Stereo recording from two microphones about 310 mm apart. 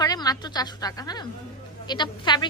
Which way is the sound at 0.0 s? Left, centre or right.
Centre.